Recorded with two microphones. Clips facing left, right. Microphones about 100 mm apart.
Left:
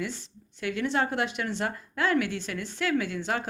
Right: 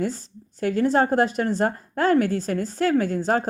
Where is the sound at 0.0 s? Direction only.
40° right (ahead or behind).